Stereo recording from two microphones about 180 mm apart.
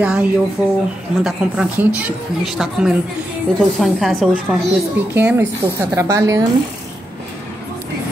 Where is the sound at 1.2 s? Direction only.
5° right (ahead or behind).